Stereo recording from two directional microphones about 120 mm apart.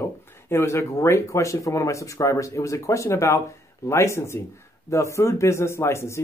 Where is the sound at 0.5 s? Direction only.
20° left (ahead or behind).